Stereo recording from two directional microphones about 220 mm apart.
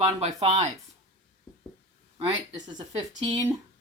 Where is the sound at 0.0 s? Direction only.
30° right (ahead or behind).